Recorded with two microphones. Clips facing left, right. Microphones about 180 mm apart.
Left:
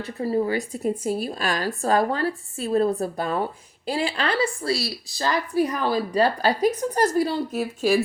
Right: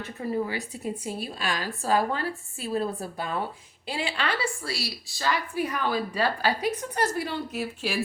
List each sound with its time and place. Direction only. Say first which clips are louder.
0.0 s a woman's voice: left 5 dB; 35° left (ahead or behind)